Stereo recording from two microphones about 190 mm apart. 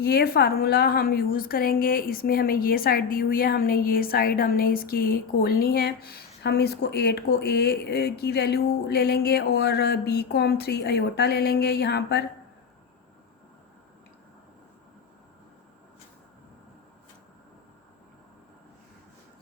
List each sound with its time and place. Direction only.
0.0 s a woman's voice: 55° left (ahead or behind)